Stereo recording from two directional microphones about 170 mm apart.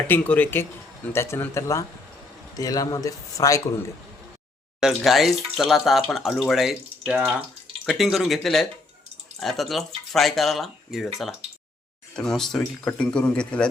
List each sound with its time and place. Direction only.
0.1 s a man's voice: 10° left (ahead or behind)
4.8 s speech: centre (ahead or behind)